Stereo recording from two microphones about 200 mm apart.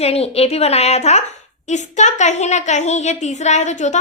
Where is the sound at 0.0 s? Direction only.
30° left (ahead or behind).